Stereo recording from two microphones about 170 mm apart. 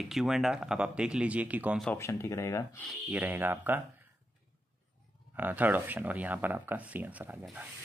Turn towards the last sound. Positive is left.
turn(degrees=-5)  # may be behind; listen again after turning